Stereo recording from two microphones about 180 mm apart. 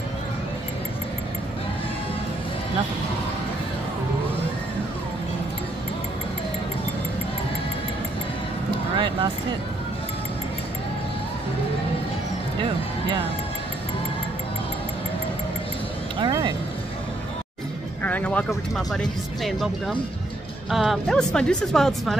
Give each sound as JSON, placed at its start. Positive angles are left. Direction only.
{"t": 8.9, "sound": "speech", "side_deg": -25}
{"t": 16.2, "sound": "a sound", "side_deg": -25}
{"t": 18.0, "sound": "speech", "side_deg": 10}